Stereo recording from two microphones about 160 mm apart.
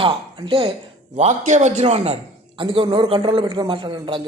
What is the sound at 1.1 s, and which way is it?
A man's voice, 45° right (ahead or behind).